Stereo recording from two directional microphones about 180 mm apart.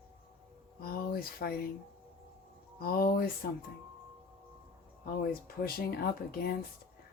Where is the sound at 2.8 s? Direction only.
55° left (ahead or behind).